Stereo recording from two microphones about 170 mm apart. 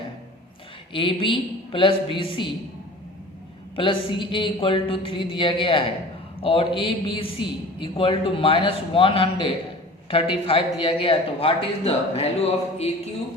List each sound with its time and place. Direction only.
0.9 s a man's voice: 30° left (ahead or behind)
3.8 s a man's voice: 30° left (ahead or behind)